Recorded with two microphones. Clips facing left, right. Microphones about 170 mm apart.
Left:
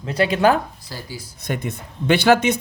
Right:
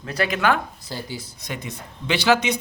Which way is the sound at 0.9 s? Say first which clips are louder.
Right 2 dB; 25° right (ahead or behind).